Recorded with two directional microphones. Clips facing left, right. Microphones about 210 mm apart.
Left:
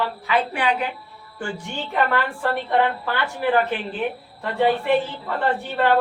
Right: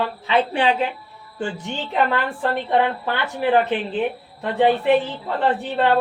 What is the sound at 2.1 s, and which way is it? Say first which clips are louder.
Speech: right 1 dB; 20° right (ahead or behind).